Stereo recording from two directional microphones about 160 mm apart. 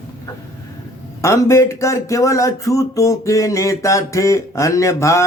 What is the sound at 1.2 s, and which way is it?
Speech, 20° left (ahead or behind).